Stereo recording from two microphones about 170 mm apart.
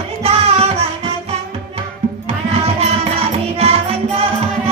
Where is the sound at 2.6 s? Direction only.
35° right (ahead or behind).